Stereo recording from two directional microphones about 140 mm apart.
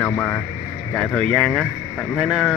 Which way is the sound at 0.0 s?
15° left (ahead or behind).